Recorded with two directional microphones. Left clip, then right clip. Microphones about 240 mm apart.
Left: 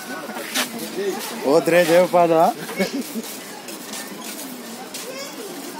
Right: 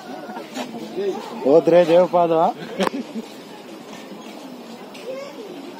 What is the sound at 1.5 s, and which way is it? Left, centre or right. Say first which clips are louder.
Speech: right 3 dB; right.